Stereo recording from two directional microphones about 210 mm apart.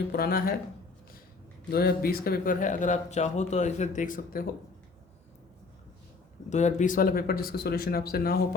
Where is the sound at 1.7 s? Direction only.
45° left (ahead or behind).